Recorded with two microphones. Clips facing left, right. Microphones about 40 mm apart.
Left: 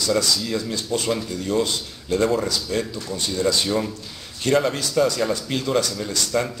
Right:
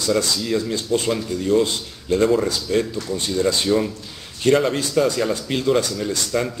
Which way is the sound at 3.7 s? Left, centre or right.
Centre.